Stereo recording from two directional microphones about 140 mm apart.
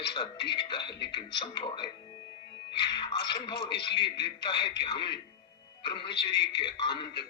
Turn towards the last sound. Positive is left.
turn(degrees=35)  # may be behind; listen again after turning